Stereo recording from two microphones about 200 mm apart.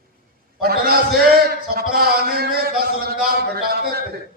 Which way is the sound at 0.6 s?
50° right (ahead or behind).